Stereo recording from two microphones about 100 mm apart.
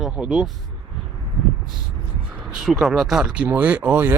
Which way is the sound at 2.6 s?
5° right (ahead or behind).